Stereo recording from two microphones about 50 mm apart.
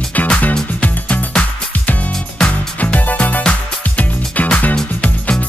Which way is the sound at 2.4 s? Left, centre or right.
Left.